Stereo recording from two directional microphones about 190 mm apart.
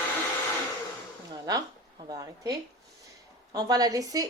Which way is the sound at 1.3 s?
20° right (ahead or behind).